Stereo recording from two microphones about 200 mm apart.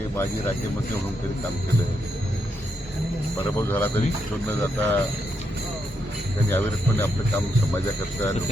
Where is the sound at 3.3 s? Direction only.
15° left (ahead or behind).